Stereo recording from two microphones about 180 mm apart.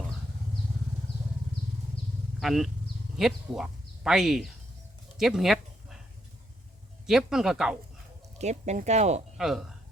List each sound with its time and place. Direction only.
2.4 s speech: centre (ahead or behind)
5.1 s a sound: centre (ahead or behind)
7.1 s speech: 5° right (ahead or behind)
8.4 s speech: 40° right (ahead or behind)
9.4 s speech: centre (ahead or behind)